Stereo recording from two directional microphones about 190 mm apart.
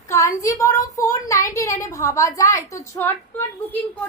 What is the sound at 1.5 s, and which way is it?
A woman's voice, 15° left (ahead or behind).